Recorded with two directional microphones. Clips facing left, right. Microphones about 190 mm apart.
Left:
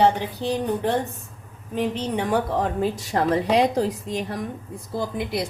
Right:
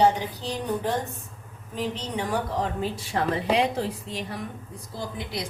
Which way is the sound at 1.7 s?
55° left (ahead or behind).